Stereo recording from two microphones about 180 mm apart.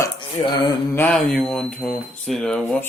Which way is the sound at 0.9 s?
10° left (ahead or behind).